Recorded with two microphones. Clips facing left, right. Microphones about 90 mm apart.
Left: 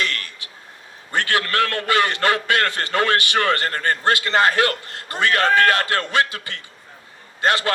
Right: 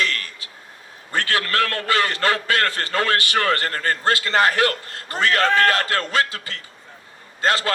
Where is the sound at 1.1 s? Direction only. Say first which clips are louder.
Left 1 dB; 20° left (ahead or behind).